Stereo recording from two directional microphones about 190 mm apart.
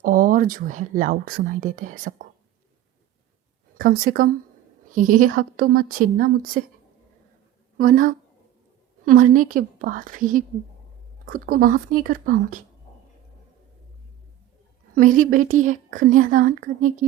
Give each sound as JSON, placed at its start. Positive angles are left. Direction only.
{"t": 0.0, "sound": "speech", "side_deg": -45}
{"t": 3.8, "sound": "speech", "side_deg": -50}
{"t": 7.8, "sound": "speech", "side_deg": -45}
{"t": 14.9, "sound": "speech", "side_deg": -45}